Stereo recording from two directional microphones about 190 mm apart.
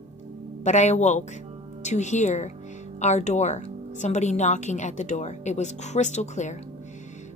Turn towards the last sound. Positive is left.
turn(degrees=40)  # may be behind; listen again after turning